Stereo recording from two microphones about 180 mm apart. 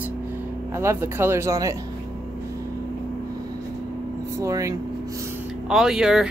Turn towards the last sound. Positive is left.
turn(degrees=-5)  # may be behind; listen again after turning